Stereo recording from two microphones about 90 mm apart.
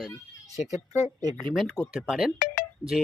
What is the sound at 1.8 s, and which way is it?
Speech, 40° left (ahead or behind).